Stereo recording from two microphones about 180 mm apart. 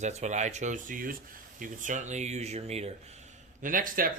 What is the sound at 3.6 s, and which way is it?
Speech, 50° right (ahead or behind).